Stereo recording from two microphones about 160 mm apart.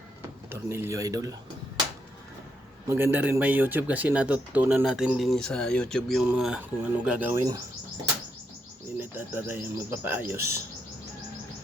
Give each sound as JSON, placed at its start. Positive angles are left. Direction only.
{"t": 0.5, "sound": "speech", "side_deg": -15}
{"t": 2.8, "sound": "speech", "side_deg": -15}
{"t": 9.0, "sound": "speech", "side_deg": -10}